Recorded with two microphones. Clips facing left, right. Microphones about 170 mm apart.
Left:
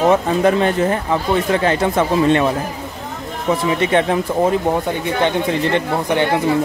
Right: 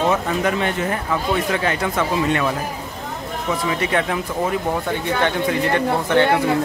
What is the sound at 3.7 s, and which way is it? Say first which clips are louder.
Speech: left 5 dB; 25° left (ahead or behind).